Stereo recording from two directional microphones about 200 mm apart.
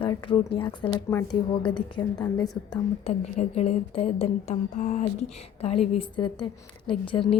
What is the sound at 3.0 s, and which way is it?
A woman's voice, 35° left (ahead or behind).